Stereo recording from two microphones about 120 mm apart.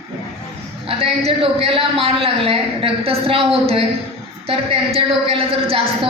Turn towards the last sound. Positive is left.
turn(degrees=-50)  # may be behind; listen again after turning